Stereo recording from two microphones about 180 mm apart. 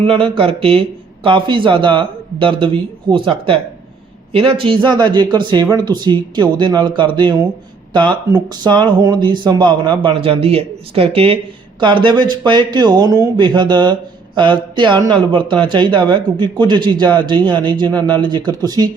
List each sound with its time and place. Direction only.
0.0 s speech: 30° right (ahead or behind)